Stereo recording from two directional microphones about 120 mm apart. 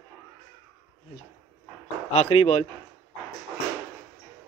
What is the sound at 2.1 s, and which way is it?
Speech, 60° left (ahead or behind).